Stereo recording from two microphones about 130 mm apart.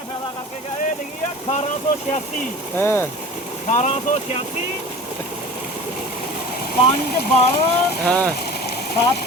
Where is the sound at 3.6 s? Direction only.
65° left (ahead or behind).